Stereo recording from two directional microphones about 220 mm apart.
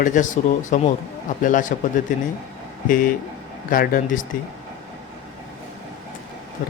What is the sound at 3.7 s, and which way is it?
Speech, 40° left (ahead or behind).